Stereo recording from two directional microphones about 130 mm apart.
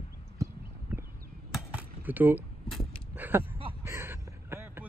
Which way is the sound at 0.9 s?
15° right (ahead or behind).